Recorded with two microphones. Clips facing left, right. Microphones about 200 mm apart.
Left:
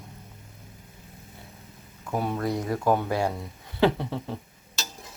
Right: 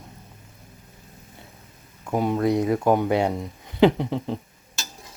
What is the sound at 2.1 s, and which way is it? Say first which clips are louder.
Speech: right 6 dB; 15° right (ahead or behind).